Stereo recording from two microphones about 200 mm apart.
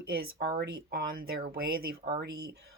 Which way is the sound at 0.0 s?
50° right (ahead or behind).